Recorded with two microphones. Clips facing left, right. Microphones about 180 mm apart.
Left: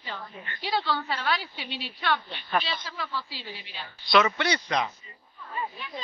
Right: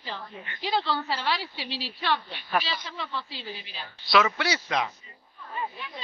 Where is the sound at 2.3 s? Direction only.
10° right (ahead or behind).